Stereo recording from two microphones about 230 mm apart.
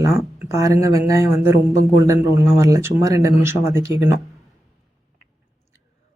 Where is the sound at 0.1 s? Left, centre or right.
Centre.